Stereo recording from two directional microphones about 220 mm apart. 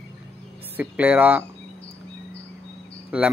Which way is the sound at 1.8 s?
50° left (ahead or behind).